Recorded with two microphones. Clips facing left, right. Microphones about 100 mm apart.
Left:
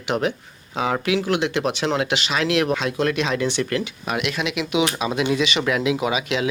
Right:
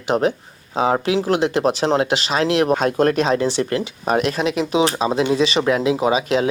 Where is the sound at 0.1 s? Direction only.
35° right (ahead or behind).